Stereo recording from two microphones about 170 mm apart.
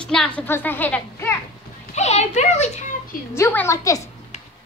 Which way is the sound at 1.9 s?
40° left (ahead or behind).